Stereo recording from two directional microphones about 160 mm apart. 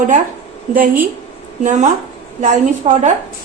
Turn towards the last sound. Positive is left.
turn(degrees=-50)  # may be behind; listen again after turning